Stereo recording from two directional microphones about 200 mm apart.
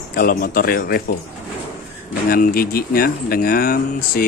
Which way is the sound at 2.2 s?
45° left (ahead or behind).